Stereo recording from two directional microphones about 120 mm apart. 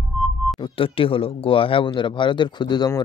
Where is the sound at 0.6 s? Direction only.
50° left (ahead or behind).